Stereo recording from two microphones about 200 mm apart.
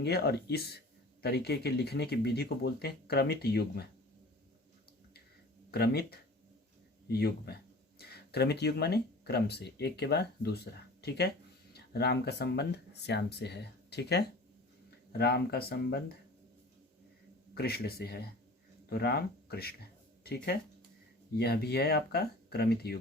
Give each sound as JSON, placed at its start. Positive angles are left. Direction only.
{"t": 0.0, "sound": "speech", "side_deg": 55}
{"t": 5.7, "sound": "speech", "side_deg": 50}
{"t": 17.5, "sound": "speech", "side_deg": 50}